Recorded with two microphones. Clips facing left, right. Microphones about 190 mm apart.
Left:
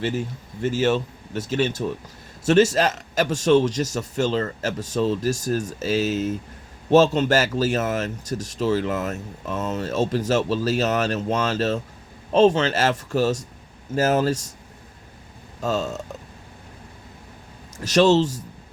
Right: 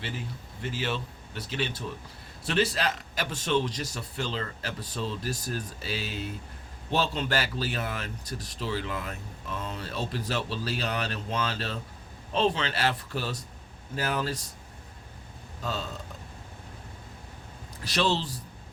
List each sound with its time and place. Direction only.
0.0 s a man's voice: 45° left (ahead or behind)
15.6 s a man's voice: 45° left (ahead or behind)
17.7 s a man's voice: 45° left (ahead or behind)